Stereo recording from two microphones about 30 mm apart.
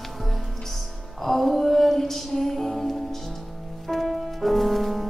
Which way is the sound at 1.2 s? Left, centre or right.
Centre.